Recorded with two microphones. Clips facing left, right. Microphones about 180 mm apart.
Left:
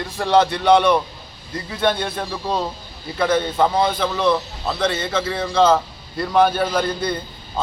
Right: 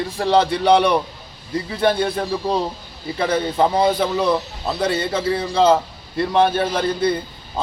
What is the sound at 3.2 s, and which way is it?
A man's voice, 35° right (ahead or behind).